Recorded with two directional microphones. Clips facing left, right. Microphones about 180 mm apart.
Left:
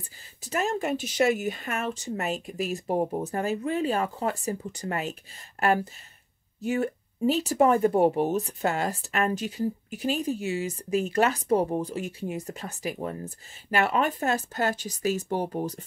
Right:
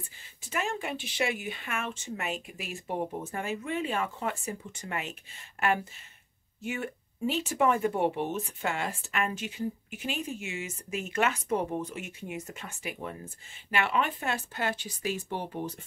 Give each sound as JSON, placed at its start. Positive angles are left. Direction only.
{"t": 0.4, "sound": "speech", "side_deg": 40}